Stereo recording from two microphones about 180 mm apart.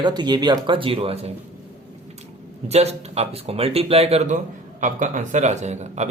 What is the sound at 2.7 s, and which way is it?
Speech, 35° right (ahead or behind).